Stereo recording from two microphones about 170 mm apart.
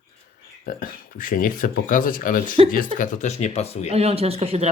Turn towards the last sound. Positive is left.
turn(degrees=-35)  # may be behind; listen again after turning